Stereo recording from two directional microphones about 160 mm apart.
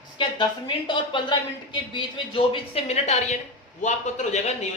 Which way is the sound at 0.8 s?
30° left (ahead or behind).